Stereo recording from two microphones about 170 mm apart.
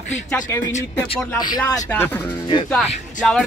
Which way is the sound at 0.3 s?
15° left (ahead or behind).